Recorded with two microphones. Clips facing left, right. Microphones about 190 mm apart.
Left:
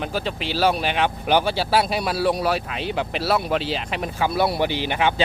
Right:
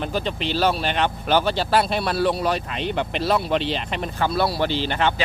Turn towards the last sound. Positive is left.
turn(degrees=15)  # may be behind; listen again after turning